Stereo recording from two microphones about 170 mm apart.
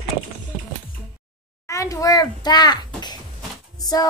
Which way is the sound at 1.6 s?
20° left (ahead or behind).